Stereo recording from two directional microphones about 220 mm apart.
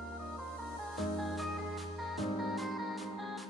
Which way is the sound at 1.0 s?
Centre (ahead or behind).